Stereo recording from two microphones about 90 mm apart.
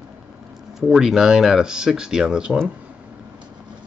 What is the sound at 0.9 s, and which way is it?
Speech, 5° right (ahead or behind).